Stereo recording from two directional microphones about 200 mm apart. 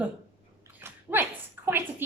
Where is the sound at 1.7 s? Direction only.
10° right (ahead or behind).